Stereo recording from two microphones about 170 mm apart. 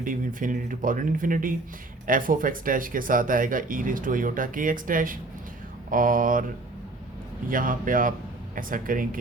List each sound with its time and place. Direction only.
0.0 s speech: 50° right (ahead or behind)
7.4 s speech: 55° right (ahead or behind)